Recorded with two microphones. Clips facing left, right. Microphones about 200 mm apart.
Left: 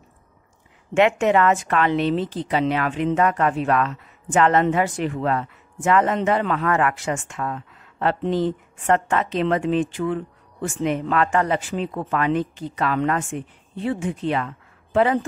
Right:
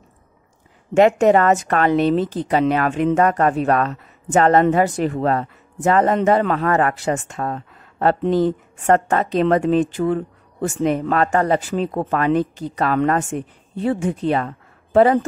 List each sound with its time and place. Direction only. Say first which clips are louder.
0.9 s a woman's voice: right 4 dB; 40° right (ahead or behind)